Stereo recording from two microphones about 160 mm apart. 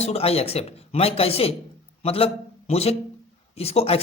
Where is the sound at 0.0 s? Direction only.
40° left (ahead or behind).